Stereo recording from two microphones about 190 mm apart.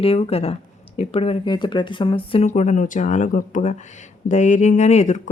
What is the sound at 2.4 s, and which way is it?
Speech, 35° left (ahead or behind).